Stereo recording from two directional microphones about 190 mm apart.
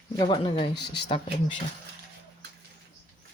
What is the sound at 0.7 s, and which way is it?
Speech, 60° left (ahead or behind).